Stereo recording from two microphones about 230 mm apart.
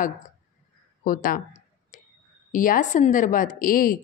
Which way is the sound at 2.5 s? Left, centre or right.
Left.